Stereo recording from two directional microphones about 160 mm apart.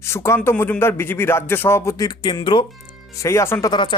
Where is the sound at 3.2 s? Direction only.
15° left (ahead or behind).